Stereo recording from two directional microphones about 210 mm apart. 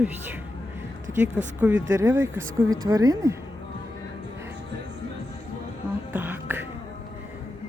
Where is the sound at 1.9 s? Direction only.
10° right (ahead or behind).